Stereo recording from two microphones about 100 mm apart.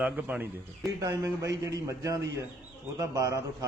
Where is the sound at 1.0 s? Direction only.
35° right (ahead or behind).